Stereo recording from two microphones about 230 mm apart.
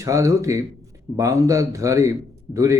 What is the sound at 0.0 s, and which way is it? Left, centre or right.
A man's voice, centre.